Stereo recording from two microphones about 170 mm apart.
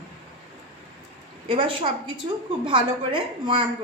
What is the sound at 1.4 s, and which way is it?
A woman's voice, 30° right (ahead or behind).